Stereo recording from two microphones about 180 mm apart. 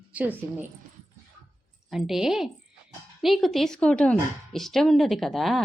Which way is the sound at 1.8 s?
Centre (ahead or behind).